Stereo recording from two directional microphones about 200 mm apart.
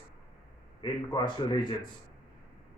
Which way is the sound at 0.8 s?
20° left (ahead or behind).